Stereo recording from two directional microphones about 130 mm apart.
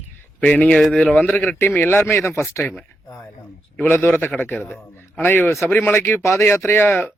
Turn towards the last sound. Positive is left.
turn(degrees=15)  # may be behind; listen again after turning